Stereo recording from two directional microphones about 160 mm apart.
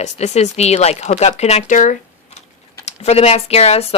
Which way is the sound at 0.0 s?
45° left (ahead or behind).